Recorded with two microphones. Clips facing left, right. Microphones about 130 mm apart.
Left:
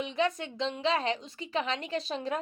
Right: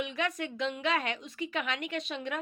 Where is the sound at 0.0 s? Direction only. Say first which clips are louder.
Left 3 dB; 30° left (ahead or behind).